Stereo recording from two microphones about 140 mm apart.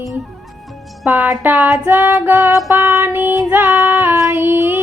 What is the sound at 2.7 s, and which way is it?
Child singing, 20° right (ahead or behind).